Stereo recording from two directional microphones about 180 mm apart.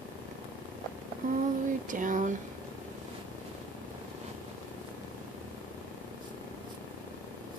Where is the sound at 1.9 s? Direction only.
45° right (ahead or behind).